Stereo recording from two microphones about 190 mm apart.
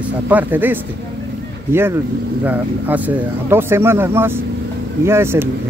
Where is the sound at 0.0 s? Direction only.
10° right (ahead or behind).